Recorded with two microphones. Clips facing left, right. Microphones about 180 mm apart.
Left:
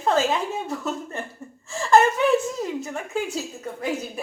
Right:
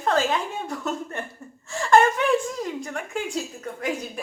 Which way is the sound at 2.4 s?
5° left (ahead or behind).